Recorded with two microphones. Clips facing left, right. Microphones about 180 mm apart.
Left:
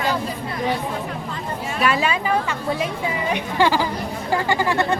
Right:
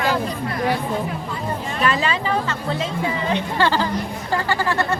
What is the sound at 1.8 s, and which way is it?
A woman's voice, 10° left (ahead or behind).